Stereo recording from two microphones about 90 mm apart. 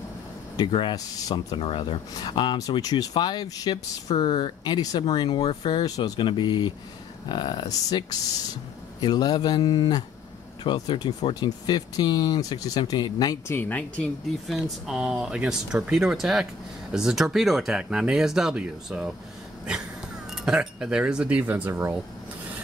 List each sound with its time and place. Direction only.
0.7 s speech: 65° left (ahead or behind)
2.8 s speech: 45° left (ahead or behind)
5.3 s speech: 80° left
5.9 s speech: 45° left (ahead or behind)
6.1 s speech: 60° left (ahead or behind)
13.5 s speech: 20° left (ahead or behind)
14.5 s speech: 5° right (ahead or behind)
20.2 s speech: 5° right (ahead or behind); by 21.9 s 25° right (ahead or behind)